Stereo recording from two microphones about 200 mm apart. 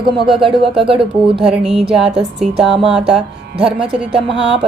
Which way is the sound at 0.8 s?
25° right (ahead or behind).